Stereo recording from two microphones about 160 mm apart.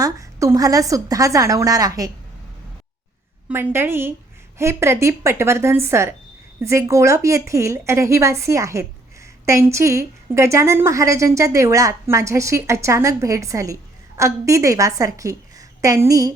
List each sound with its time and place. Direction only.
0.0 s a woman's voice: 20° right (ahead or behind)
3.5 s a woman's voice: 15° right (ahead or behind)